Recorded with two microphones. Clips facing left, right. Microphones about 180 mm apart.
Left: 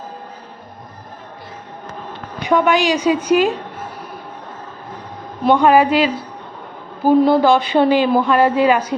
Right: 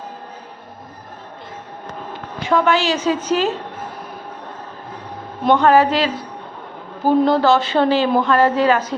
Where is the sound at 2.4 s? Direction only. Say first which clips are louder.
Left 2 dB; 15° left (ahead or behind).